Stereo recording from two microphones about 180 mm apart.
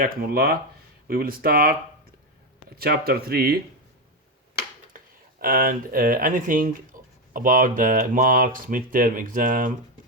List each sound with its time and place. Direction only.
0.0 s speech: 55° right (ahead or behind)
2.7 s speech: 60° right (ahead or behind)
4.9 s speech: 55° right (ahead or behind)